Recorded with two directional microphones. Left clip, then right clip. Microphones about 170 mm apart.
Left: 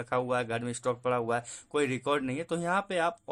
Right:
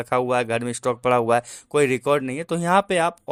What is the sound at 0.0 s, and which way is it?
Speech, 40° right (ahead or behind).